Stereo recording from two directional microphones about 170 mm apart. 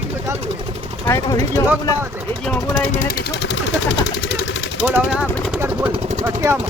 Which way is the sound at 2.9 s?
50° left (ahead or behind).